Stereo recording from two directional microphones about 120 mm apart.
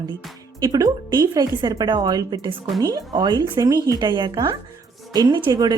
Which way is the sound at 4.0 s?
40° right (ahead or behind).